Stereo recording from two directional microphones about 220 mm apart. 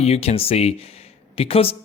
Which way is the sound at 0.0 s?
30° left (ahead or behind).